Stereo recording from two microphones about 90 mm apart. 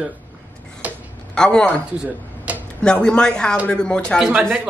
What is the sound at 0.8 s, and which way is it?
Tick-tock, 15° right (ahead or behind).